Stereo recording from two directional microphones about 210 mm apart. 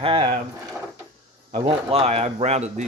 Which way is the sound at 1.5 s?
25° right (ahead or behind).